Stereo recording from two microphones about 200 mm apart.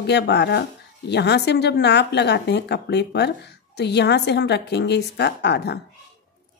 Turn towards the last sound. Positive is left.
turn(degrees=55)  # may be behind; listen again after turning